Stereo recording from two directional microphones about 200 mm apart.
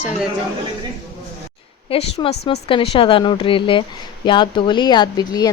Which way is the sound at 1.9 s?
30° left (ahead or behind).